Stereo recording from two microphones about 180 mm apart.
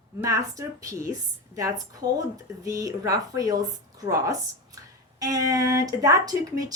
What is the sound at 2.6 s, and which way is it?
Speech, 20° right (ahead or behind).